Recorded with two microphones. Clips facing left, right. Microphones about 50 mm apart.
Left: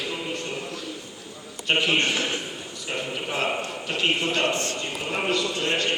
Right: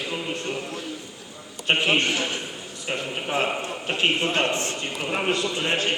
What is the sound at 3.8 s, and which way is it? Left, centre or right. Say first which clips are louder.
A man's voice: right 2 dB; right.